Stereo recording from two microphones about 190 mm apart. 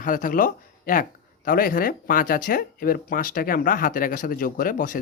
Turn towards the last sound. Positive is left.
turn(degrees=45)  # may be behind; listen again after turning